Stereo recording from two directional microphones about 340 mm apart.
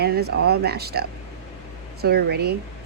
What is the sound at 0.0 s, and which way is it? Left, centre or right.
Speech, right.